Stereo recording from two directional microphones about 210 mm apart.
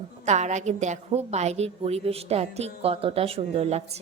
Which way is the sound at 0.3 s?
35° right (ahead or behind).